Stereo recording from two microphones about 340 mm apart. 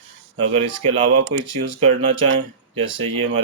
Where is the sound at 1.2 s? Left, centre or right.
Right.